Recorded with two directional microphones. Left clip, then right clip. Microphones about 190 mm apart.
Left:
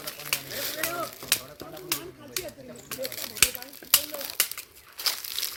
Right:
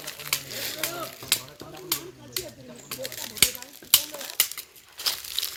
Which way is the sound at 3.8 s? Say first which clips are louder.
Right 2 dB; 30° right (ahead or behind).